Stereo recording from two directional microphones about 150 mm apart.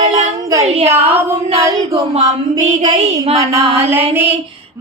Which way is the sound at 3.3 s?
45° right (ahead or behind).